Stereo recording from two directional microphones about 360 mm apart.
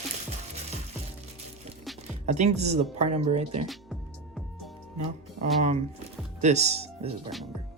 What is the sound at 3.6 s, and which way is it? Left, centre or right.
Music, centre.